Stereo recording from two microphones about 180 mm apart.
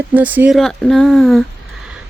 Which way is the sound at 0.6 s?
5° left (ahead or behind).